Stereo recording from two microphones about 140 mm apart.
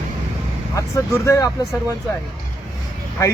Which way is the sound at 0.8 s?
20° left (ahead or behind).